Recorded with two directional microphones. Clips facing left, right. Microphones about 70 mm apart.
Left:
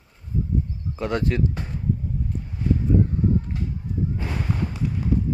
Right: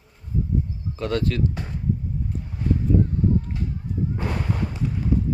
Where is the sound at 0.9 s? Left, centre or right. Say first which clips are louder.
Even; centre.